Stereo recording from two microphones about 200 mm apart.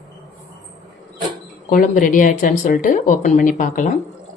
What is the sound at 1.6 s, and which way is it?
Speech, 40° left (ahead or behind).